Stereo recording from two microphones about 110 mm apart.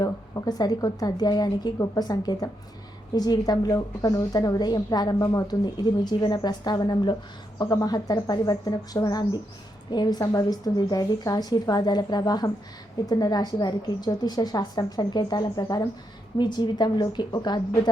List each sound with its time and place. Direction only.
0.0 s a woman's voice: 35° left (ahead or behind)